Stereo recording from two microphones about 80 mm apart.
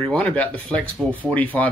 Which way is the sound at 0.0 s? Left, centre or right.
Centre.